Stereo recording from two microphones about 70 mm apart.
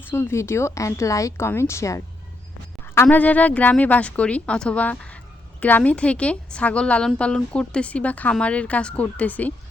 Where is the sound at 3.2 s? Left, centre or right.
Left.